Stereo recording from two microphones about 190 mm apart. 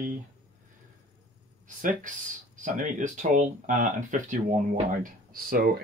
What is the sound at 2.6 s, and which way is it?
Speech, 40° right (ahead or behind).